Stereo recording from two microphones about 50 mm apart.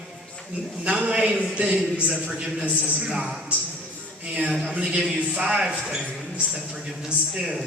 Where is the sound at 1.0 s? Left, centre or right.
Right.